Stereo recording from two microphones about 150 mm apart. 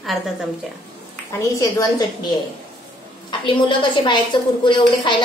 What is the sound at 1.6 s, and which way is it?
Speech, 25° left (ahead or behind).